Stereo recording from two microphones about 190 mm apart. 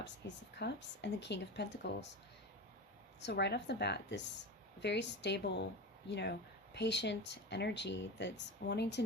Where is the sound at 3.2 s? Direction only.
60° left (ahead or behind).